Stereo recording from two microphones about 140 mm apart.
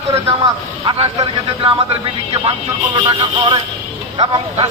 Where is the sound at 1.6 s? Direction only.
40° right (ahead or behind).